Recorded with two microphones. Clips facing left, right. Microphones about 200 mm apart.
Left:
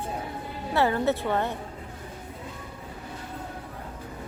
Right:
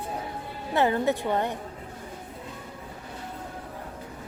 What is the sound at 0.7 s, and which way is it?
Speech, 20° right (ahead or behind).